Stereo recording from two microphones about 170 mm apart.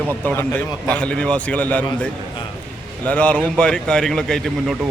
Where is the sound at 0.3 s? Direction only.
10° left (ahead or behind).